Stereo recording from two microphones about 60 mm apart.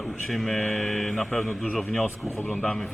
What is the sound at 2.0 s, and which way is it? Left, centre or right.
Speech, left.